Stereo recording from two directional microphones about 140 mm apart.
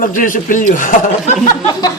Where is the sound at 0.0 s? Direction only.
70° left (ahead or behind).